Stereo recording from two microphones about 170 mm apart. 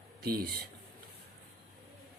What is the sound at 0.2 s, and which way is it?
Speech, 65° right (ahead or behind).